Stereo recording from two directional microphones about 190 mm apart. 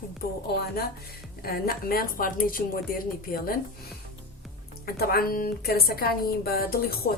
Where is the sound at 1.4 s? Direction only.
50° left (ahead or behind).